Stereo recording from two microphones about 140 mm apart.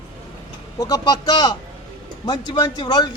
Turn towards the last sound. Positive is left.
turn(degrees=30)  # may be behind; listen again after turning